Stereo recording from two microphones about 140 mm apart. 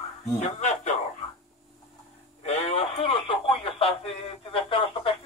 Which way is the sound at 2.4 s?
50° left (ahead or behind).